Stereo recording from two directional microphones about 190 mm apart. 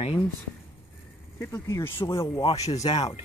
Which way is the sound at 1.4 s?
15° left (ahead or behind).